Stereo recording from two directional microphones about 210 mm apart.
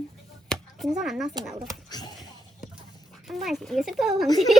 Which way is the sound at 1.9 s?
20° left (ahead or behind).